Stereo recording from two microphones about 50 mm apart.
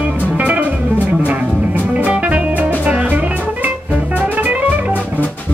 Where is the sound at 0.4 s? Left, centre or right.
Right.